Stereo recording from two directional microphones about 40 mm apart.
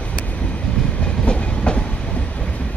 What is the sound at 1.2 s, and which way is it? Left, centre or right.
Train, left.